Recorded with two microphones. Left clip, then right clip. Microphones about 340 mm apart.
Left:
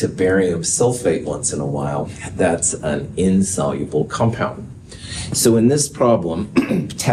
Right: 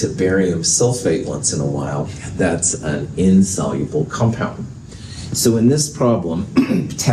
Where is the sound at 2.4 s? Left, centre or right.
Left.